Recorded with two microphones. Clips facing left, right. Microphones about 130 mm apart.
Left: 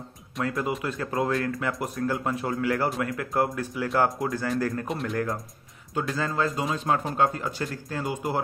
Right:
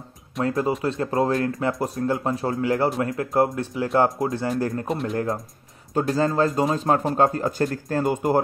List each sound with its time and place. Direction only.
0.4 s speech: 30° right (ahead or behind)